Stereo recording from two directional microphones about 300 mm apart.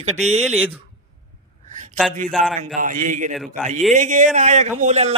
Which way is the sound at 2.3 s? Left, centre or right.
Centre.